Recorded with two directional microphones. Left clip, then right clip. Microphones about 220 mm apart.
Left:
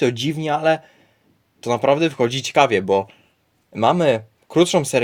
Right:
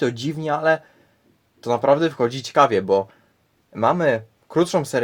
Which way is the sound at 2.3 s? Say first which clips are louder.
Right 1 dB; 35° left (ahead or behind).